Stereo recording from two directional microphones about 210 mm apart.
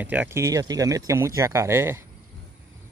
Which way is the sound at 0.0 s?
10° right (ahead or behind).